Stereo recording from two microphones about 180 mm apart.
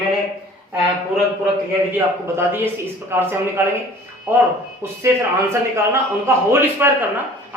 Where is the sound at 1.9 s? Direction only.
10° right (ahead or behind).